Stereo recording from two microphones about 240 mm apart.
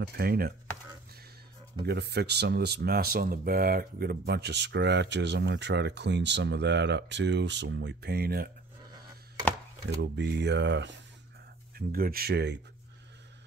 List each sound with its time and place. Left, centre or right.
0.2 s speech: right
1.8 s speech: right
10.1 s speech: right